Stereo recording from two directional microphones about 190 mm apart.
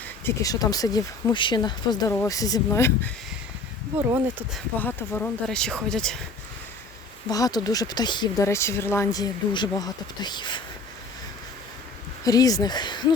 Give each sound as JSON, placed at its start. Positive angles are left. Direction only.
{"t": 0.3, "sound": "speech", "side_deg": 20}
{"t": 4.5, "sound": "speech", "side_deg": 10}
{"t": 7.3, "sound": "speech", "side_deg": 20}
{"t": 12.2, "sound": "speech", "side_deg": 20}